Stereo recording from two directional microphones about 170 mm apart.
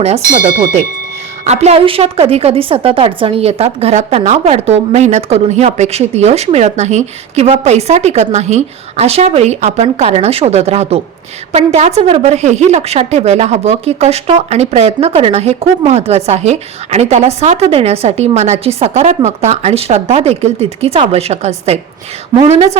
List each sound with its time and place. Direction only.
0.0 s a woman's voice: 40° right (ahead or behind)
0.3 s a woman's voice: 55° right (ahead or behind); by 22.8 s 40° right (ahead or behind)